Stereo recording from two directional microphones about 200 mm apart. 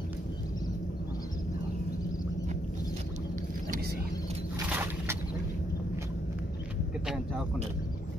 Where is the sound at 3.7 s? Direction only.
50° right (ahead or behind).